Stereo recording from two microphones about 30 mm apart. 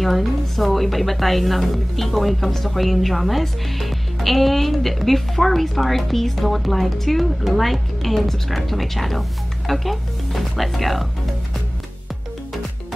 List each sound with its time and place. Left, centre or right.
0.0 s speech: centre